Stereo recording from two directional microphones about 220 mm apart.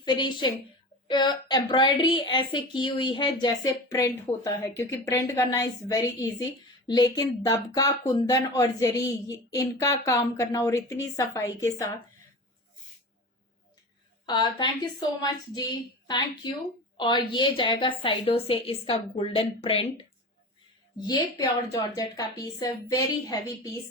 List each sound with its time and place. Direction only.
0.0 s a woman's voice: 20° left (ahead or behind)
14.3 s a woman's voice: 20° left (ahead or behind)